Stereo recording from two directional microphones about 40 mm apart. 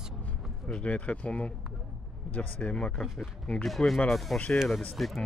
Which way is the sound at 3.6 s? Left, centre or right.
Centre.